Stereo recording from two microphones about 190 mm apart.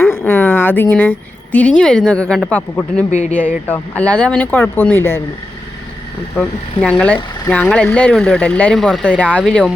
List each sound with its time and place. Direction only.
0.0 s a sound: 15° left (ahead or behind)
1.5 s speech: 5° left (ahead or behind)
3.1 s speech: 40° left (ahead or behind)
3.7 s speech: 5° left (ahead or behind)
6.8 s speech: 5° left (ahead or behind)